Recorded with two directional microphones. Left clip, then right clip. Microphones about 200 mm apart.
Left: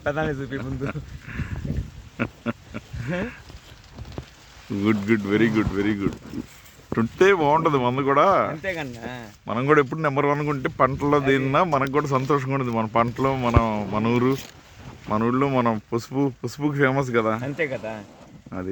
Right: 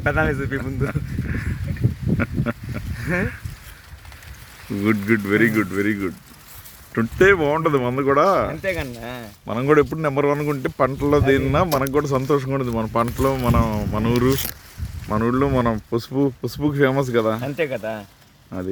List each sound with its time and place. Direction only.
0.0 s a man's voice: 20° right (ahead or behind)
2.1 s duck: 5° left (ahead or behind)
3.1 s speech: 35° right (ahead or behind)
4.8 s speech: 5° left (ahead or behind)